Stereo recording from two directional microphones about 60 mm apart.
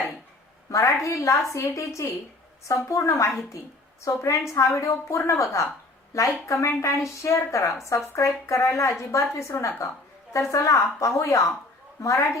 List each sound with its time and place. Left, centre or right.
0.7 s a woman's voice: left